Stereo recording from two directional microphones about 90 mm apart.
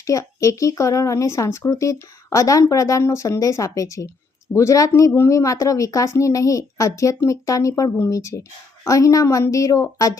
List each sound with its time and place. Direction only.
0.0 s speech: 35° left (ahead or behind)